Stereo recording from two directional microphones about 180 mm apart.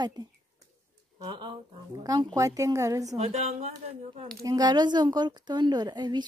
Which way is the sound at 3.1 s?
40° right (ahead or behind).